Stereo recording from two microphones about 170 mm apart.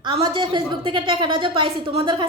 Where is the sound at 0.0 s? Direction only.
30° right (ahead or behind).